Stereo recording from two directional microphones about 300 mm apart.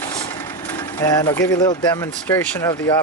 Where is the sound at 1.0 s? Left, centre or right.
Centre.